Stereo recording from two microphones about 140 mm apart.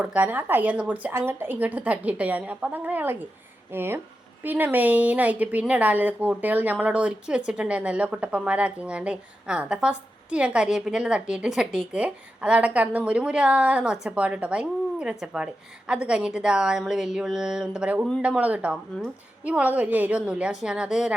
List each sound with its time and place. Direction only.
0.0 s speech: 10° right (ahead or behind)